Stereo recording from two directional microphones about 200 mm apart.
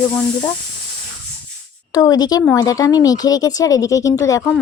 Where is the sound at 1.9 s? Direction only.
20° left (ahead or behind).